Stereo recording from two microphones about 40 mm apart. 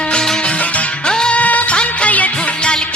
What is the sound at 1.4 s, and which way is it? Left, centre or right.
Music, left.